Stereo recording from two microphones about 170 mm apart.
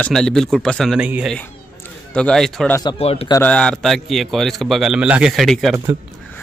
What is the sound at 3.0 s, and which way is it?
Speech, 35° left (ahead or behind).